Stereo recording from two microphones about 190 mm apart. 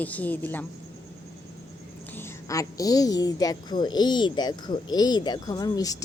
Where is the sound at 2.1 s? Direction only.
15° left (ahead or behind).